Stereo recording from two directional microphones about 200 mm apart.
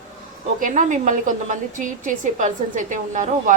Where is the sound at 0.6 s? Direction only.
40° right (ahead or behind).